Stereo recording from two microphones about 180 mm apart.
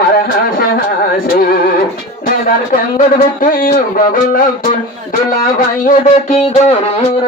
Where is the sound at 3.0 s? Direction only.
50° left (ahead or behind).